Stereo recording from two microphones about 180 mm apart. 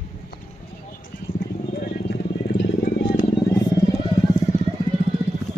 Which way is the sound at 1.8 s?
75° left (ahead or behind).